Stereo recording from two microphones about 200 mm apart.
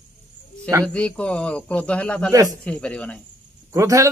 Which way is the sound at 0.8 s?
5° left (ahead or behind).